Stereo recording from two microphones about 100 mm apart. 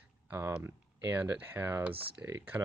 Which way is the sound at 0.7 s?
25° right (ahead or behind).